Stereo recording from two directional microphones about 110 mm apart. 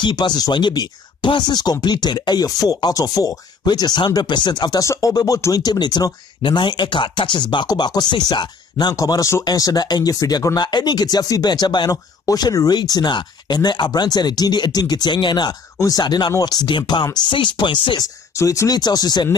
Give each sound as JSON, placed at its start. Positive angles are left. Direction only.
{"t": 0.0, "sound": "speech", "side_deg": 40}
{"t": 18.3, "sound": "speech", "side_deg": 30}